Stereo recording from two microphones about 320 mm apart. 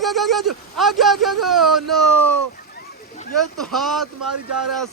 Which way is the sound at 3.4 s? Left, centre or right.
Centre.